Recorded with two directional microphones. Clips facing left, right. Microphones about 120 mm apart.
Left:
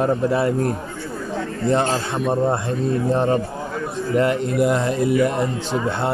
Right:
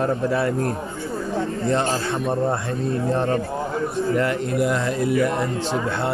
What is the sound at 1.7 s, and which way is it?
A man's voice, 20° left (ahead or behind).